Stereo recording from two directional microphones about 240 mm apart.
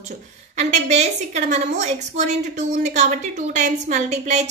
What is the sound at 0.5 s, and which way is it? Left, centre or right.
A woman's voice, right.